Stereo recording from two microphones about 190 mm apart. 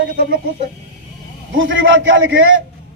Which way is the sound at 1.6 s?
85° right.